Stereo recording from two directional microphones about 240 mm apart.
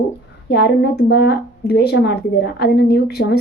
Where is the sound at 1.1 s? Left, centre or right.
Left.